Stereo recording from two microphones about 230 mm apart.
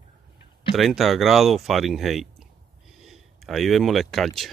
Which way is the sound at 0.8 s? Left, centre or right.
Centre.